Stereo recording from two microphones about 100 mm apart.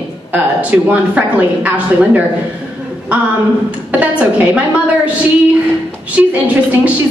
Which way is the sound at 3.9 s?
15° right (ahead or behind).